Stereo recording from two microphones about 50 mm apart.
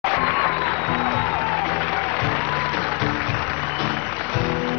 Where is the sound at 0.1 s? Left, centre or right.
Left.